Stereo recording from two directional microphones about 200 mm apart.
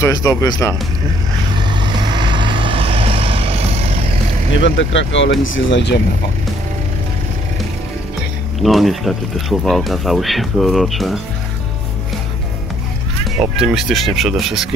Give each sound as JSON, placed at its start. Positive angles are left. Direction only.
{"t": 0.0, "sound": "speech", "side_deg": 15}
{"t": 1.6, "sound": "vehicle", "side_deg": -20}
{"t": 4.6, "sound": "speech", "side_deg": 65}
{"t": 8.6, "sound": "speech", "side_deg": 0}
{"t": 13.4, "sound": "speech", "side_deg": 0}